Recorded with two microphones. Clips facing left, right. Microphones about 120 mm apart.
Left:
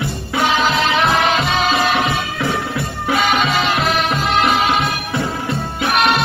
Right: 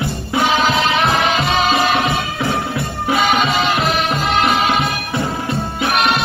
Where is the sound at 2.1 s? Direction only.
20° right (ahead or behind).